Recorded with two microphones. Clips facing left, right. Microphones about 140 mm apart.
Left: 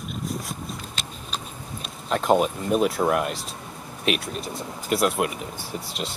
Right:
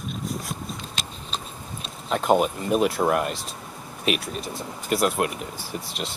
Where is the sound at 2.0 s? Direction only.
Centre (ahead or behind).